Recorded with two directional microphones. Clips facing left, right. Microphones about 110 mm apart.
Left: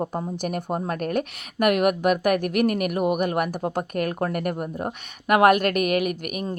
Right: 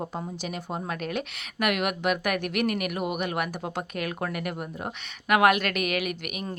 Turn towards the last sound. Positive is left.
turn(degrees=40)  # may be behind; listen again after turning